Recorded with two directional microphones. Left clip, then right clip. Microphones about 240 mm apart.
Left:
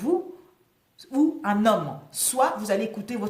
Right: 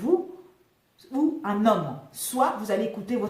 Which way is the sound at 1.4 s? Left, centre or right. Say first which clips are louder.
Left 1 dB; left.